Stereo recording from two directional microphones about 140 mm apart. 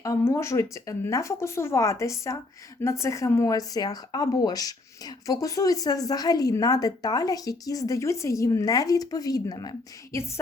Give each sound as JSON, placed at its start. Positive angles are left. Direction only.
{"t": 0.0, "sound": "speech", "side_deg": 20}